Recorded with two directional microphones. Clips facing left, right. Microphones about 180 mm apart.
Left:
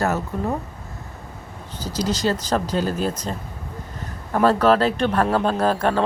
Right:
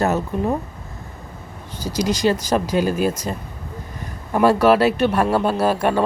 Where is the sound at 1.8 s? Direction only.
10° right (ahead or behind).